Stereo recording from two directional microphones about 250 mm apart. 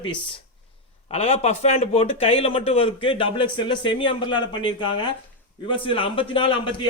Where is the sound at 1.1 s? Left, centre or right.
Left.